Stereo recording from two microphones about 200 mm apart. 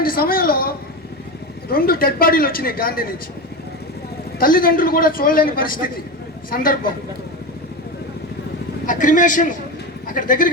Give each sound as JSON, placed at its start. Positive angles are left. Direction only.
{"t": 0.0, "sound": "a sound", "side_deg": 45}
{"t": 1.7, "sound": "a man's voice", "side_deg": 45}
{"t": 4.4, "sound": "a man's voice", "side_deg": 45}
{"t": 8.9, "sound": "a man's voice", "side_deg": 40}